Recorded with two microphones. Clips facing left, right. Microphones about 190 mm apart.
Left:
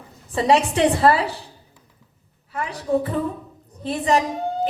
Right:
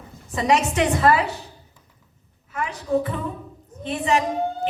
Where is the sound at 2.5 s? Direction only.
35° left (ahead or behind).